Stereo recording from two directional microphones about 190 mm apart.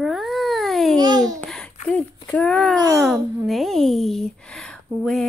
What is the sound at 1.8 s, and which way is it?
Speech, 5° left (ahead or behind).